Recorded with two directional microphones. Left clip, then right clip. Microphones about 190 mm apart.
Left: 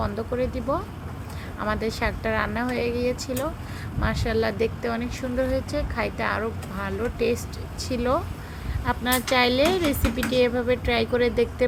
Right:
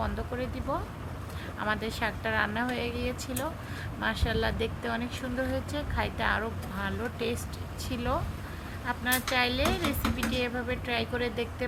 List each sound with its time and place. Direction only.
0.0 s speech: 10° left (ahead or behind)